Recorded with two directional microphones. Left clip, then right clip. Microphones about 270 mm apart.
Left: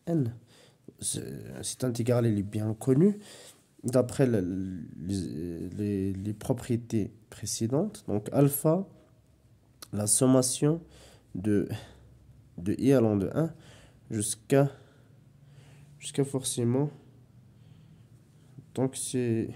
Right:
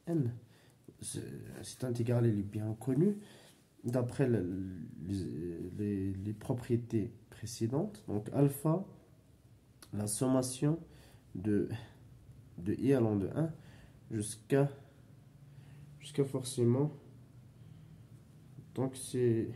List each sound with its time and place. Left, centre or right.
0.0 s speech: left
9.8 s speech: left
16.0 s speech: left
18.7 s speech: left